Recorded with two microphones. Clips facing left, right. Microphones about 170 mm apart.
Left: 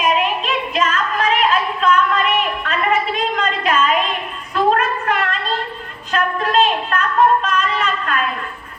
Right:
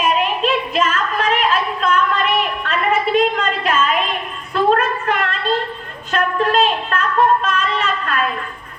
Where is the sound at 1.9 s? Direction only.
30° right (ahead or behind).